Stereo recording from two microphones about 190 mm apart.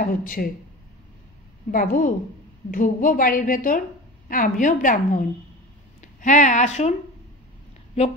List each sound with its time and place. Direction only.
0.0 s a woman's voice: 45° left (ahead or behind)
1.7 s a woman's voice: 45° left (ahead or behind)